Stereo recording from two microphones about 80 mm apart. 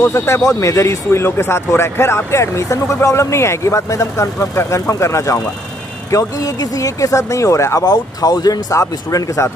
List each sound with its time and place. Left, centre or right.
0.0 s speech: left
7.8 s speech: left